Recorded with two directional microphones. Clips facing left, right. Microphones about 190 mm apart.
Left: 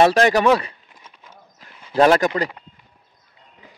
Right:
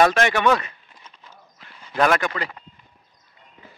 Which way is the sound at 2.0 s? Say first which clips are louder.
Left 5 dB; 35° left (ahead or behind).